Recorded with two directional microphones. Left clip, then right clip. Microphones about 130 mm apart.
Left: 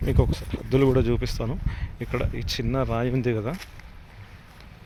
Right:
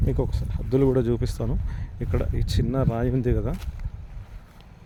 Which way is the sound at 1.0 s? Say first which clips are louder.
Even; 40° right (ahead or behind).